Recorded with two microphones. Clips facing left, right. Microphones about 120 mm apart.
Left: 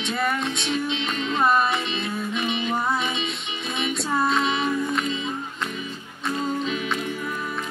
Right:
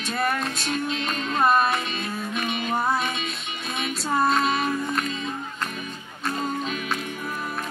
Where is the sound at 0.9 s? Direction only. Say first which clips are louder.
Left 1 dB; 45° right (ahead or behind).